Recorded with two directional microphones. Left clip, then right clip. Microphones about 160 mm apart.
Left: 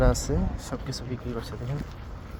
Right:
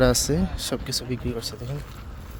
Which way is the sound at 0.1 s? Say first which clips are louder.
Right 5 dB; 70° right (ahead or behind).